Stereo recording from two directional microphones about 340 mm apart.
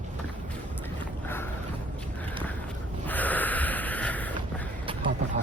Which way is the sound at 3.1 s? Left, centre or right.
Centre.